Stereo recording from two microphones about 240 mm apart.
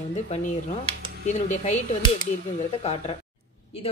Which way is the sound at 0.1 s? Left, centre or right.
Left.